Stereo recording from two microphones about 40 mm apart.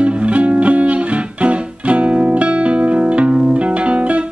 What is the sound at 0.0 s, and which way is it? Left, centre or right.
Music, right.